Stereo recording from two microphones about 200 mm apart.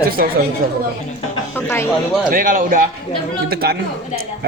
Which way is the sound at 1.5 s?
10° left (ahead or behind).